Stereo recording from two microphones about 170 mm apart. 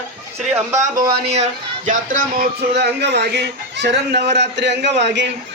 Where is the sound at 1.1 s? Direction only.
35° right (ahead or behind).